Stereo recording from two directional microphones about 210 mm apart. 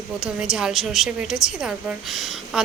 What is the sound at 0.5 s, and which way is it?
A woman's voice, centre (ahead or behind).